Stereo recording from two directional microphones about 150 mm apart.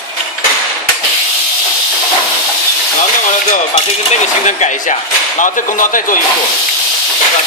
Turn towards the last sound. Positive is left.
turn(degrees=60)  # may be behind; listen again after turning